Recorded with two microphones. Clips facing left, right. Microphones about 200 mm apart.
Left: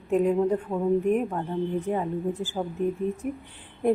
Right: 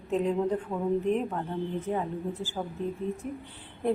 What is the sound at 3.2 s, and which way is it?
Speech, 15° left (ahead or behind).